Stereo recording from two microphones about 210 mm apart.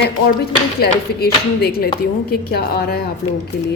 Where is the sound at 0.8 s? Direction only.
50° left (ahead or behind).